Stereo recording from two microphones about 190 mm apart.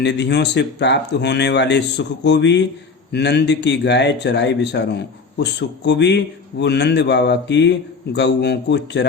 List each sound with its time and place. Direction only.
0.0 s speech: 65° left (ahead or behind)